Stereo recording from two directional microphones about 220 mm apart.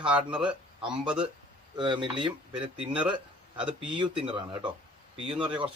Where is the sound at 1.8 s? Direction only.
20° right (ahead or behind).